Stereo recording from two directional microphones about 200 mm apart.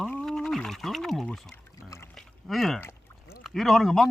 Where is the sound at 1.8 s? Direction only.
15° left (ahead or behind).